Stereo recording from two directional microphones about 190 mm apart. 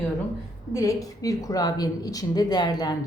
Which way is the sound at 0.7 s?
15° left (ahead or behind).